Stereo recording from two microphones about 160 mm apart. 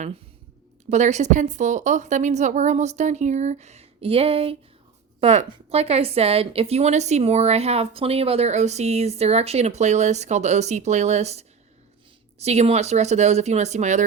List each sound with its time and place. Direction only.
0.9 s a woman's voice: 45° right (ahead or behind)